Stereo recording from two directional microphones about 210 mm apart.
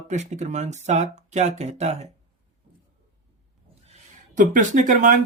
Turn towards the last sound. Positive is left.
turn(degrees=-35)  # may be behind; listen again after turning